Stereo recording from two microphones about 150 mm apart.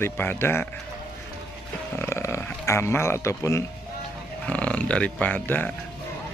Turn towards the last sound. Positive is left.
turn(degrees=10)  # may be behind; listen again after turning